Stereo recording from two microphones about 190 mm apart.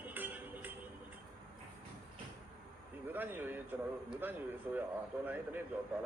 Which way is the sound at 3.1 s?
10° right (ahead or behind).